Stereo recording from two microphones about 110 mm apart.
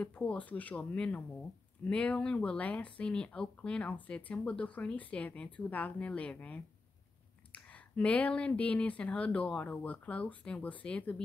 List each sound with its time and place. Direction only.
0.0 s speech: 10° left (ahead or behind)